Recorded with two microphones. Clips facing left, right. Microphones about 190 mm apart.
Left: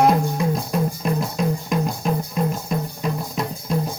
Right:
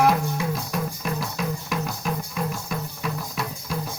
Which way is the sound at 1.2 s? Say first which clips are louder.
Left 6 dB; 30° left (ahead or behind).